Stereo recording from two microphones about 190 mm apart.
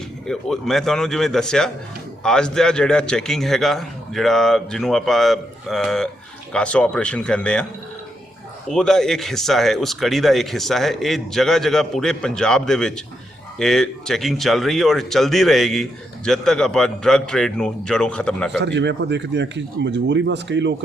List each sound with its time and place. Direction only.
0.3 s a man's voice: centre (ahead or behind)
18.6 s speech: 65° right (ahead or behind)